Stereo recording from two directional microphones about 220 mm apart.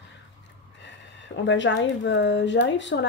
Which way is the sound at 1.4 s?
55° left (ahead or behind).